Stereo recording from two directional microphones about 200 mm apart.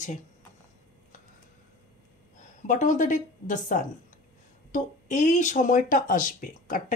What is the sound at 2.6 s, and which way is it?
A woman's voice, 40° left (ahead or behind).